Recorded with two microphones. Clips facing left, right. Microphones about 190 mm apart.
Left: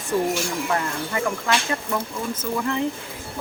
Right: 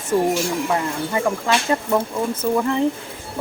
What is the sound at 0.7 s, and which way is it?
Speech, 25° right (ahead or behind).